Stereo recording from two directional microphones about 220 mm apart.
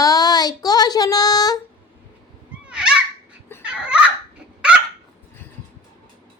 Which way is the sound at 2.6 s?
5° right (ahead or behind).